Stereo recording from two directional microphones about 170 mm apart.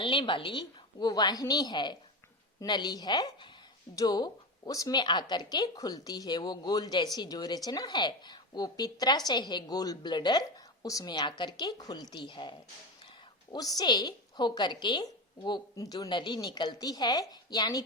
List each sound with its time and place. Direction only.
0.0 s a woman's voice: 30° left (ahead or behind)